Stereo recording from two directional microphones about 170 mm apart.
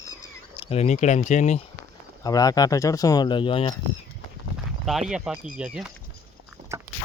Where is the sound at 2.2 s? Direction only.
20° left (ahead or behind).